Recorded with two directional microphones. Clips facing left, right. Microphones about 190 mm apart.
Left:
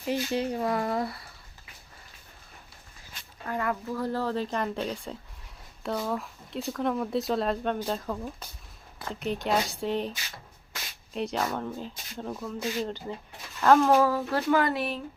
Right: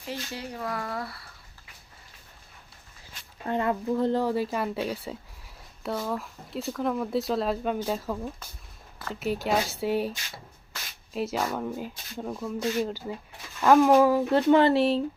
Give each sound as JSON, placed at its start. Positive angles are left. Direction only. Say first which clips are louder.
{"t": 0.1, "sound": "speech", "louder": "left 8 dB", "side_deg": 20}
{"t": 3.4, "sound": "a woman's voice", "louder": "right 4 dB", "side_deg": -25}